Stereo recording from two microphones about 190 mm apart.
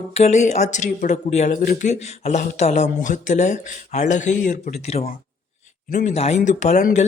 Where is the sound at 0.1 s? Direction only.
35° left (ahead or behind).